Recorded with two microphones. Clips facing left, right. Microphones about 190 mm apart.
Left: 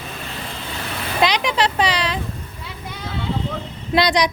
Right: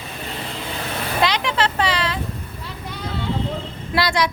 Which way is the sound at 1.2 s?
15° left (ahead or behind).